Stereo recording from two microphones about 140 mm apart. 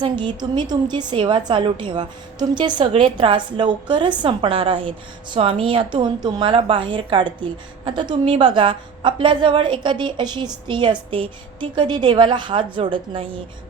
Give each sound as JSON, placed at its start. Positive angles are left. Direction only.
{"t": 0.0, "sound": "a woman's voice", "side_deg": -35}